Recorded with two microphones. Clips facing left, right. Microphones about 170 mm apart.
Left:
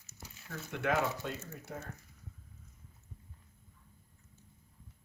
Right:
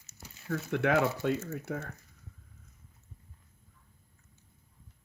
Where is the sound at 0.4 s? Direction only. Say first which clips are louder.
Right 6 dB; 60° right (ahead or behind).